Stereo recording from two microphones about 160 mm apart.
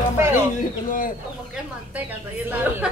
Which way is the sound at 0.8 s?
60° left (ahead or behind).